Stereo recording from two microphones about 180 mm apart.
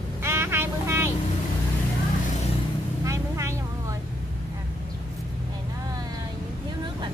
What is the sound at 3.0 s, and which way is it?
Vehicle, 15° right (ahead or behind).